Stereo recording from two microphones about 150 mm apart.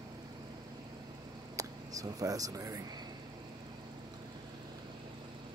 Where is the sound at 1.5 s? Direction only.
25° right (ahead or behind).